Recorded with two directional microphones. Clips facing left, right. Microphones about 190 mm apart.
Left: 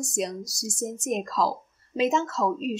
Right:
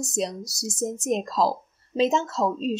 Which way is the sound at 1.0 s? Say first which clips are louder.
Right 2 dB; 30° right (ahead or behind).